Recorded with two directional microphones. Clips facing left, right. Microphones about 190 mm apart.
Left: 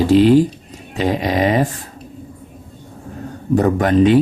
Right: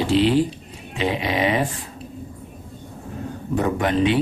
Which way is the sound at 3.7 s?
45° left (ahead or behind).